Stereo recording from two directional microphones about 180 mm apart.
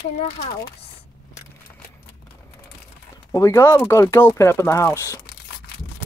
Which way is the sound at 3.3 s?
15° left (ahead or behind).